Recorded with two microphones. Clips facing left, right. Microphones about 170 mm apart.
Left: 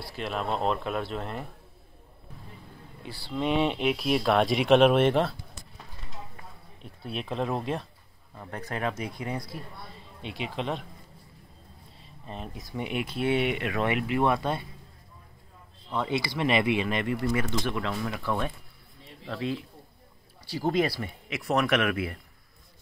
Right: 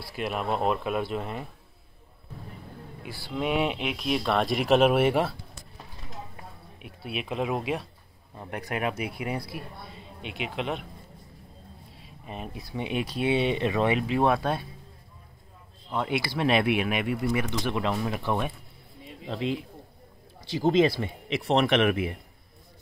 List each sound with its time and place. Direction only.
0.1 s speech: 5° right (ahead or behind)
3.1 s speech: 10° right (ahead or behind)
6.8 s speech: 10° right (ahead or behind)
12.0 s speech: 10° right (ahead or behind)
15.9 s speech: 10° right (ahead or behind)